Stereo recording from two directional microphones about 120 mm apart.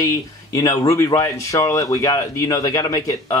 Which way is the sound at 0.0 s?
30° left (ahead or behind).